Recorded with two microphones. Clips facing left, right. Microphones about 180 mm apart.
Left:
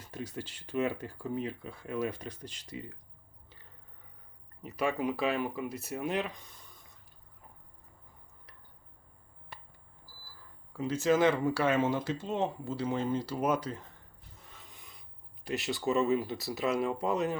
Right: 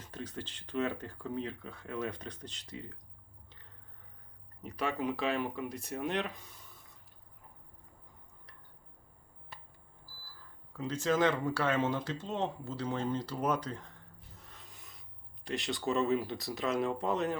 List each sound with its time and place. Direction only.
0.0 s speech: 10° left (ahead or behind)
4.6 s speech: 5° left (ahead or behind)
9.5 s smoke detector: 60° left (ahead or behind)
10.8 s speech: 10° left (ahead or behind)
14.4 s rub: centre (ahead or behind)
15.4 s speech: 5° left (ahead or behind)